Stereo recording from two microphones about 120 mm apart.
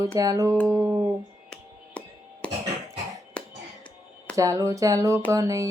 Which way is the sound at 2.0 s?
10° left (ahead or behind).